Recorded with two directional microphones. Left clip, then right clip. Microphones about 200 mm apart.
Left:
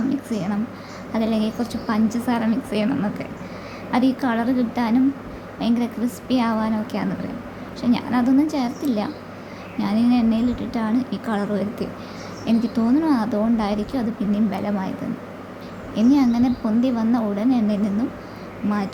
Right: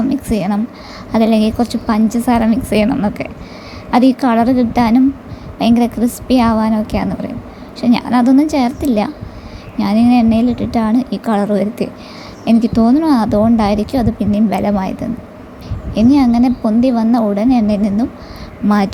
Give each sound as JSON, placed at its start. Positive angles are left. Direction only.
{"t": 0.1, "sound": "a woman's voice", "side_deg": -35}
{"t": 16.0, "sound": "a woman's voice", "side_deg": -30}